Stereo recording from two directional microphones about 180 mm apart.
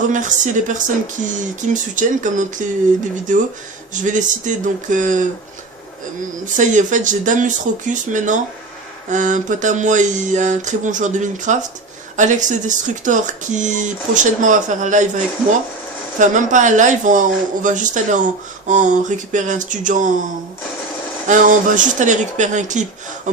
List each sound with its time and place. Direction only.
0.1 s speech: 45° right (ahead or behind)
6.4 s speech: 45° right (ahead or behind)
21.2 s speech: 45° right (ahead or behind)